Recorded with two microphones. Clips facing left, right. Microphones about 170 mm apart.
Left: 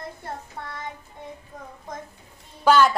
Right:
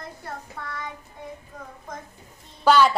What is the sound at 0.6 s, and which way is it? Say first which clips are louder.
Child singing: even; 25° left (ahead or behind).